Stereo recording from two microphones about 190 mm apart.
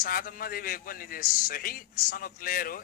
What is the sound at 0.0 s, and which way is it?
A man's voice, 50° left (ahead or behind).